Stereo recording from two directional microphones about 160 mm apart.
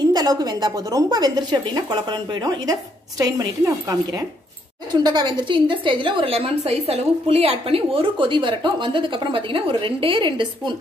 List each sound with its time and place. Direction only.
0.1 s a woman's voice: 25° right (ahead or behind)